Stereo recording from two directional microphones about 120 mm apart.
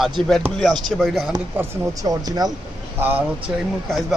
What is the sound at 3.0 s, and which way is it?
Speech, 15° right (ahead or behind).